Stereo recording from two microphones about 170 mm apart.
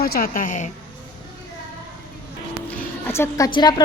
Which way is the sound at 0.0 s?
55° left (ahead or behind).